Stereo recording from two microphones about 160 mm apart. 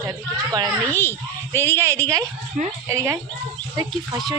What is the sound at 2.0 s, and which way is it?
A woman's voice, 20° right (ahead or behind).